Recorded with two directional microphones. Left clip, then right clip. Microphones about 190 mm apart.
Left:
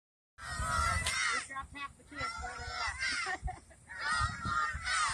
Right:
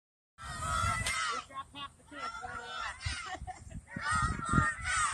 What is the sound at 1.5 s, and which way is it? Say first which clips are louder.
Fowl: left 1 dB; 30° right (ahead or behind).